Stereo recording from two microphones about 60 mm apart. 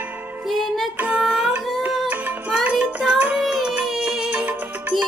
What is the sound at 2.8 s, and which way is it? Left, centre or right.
Child singing, centre.